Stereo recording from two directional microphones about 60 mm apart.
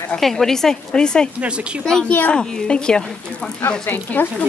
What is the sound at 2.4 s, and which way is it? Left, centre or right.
Speech, centre.